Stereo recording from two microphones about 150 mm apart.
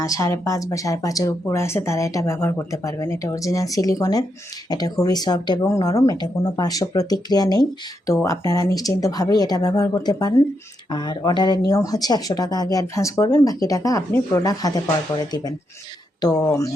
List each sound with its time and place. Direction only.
0.0 s speech: 20° left (ahead or behind)
16.2 s speech: 25° left (ahead or behind)